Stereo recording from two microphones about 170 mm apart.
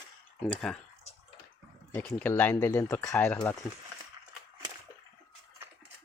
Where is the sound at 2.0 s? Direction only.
10° left (ahead or behind).